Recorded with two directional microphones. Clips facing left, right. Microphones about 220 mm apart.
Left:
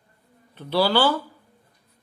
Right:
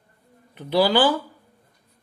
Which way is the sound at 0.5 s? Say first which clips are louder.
Right 2 dB; 15° right (ahead or behind).